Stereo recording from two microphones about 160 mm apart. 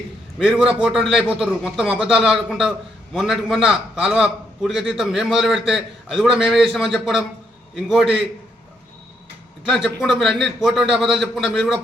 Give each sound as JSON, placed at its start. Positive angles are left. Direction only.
{"t": 0.3, "sound": "a man's voice", "side_deg": 0}
{"t": 9.6, "sound": "a man's voice", "side_deg": 0}